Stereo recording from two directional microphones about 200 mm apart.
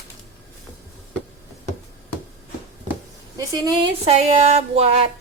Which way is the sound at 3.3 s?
20° right (ahead or behind).